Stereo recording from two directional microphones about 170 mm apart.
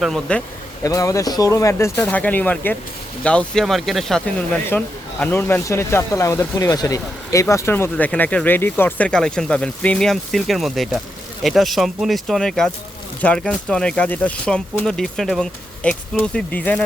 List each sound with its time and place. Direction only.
0.0 s speech: 5° left (ahead or behind)
0.9 s speech: 20° left (ahead or behind)